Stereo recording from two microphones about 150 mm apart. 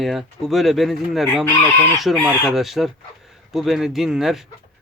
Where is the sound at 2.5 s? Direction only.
Centre (ahead or behind).